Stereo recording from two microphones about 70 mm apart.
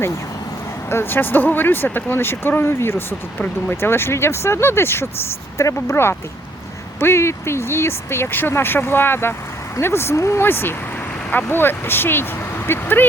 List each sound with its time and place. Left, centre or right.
0.9 s speech: left
3.3 s speech: left
3.8 s speech: left